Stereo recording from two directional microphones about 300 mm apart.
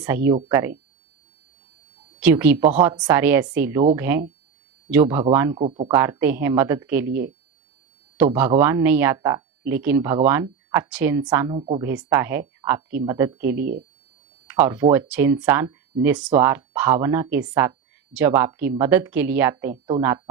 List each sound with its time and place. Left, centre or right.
0.0 s speech: centre
2.2 s speech: centre
5.5 s speech: centre
5.9 s speech: centre
11.9 s speech: centre